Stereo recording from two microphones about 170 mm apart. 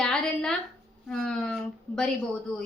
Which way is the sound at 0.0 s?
5° left (ahead or behind).